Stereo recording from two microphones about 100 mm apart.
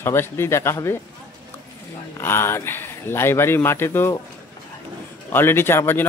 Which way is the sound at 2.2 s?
25° left (ahead or behind).